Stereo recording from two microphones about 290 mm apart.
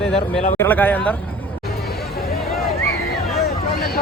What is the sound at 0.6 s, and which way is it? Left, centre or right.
Speech, centre.